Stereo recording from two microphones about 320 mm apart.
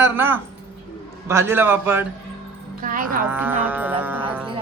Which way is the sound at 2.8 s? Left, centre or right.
Right.